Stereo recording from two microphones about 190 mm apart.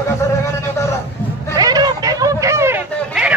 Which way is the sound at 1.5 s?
20° right (ahead or behind).